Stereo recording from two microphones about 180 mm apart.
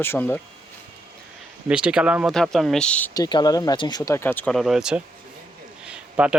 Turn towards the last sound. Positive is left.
turn(degrees=-5)  # may be behind; listen again after turning